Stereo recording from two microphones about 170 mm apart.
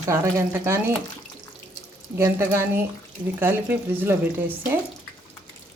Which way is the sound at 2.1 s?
15° right (ahead or behind).